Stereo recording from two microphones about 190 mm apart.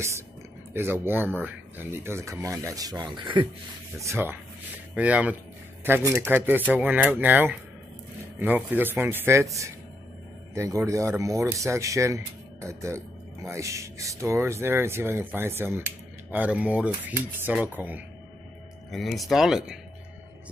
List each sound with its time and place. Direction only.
0.7 s speech: 10° right (ahead or behind)
4.0 s speech: 15° right (ahead or behind)
10.5 s speech: 15° right (ahead or behind)